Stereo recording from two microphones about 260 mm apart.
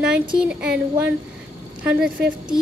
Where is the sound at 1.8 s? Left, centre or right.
Centre.